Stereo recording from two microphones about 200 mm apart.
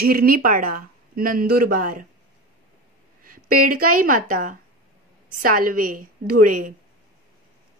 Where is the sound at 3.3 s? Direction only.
45° right (ahead or behind).